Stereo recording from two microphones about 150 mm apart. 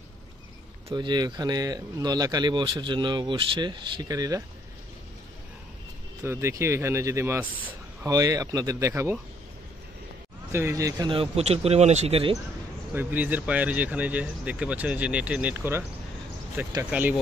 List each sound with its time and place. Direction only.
0.8 s speech: 30° right (ahead or behind)
6.2 s speech: 15° right (ahead or behind)
10.5 s speech: 20° right (ahead or behind)
11.1 s speech: 40° right (ahead or behind)
12.9 s speech: 10° right (ahead or behind)